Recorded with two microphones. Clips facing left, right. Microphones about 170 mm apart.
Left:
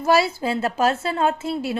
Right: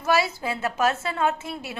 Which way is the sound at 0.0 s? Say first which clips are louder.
Left 4 dB; 30° left (ahead or behind).